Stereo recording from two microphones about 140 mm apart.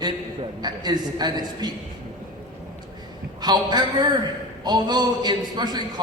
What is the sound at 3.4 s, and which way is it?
A man's voice, 30° right (ahead or behind).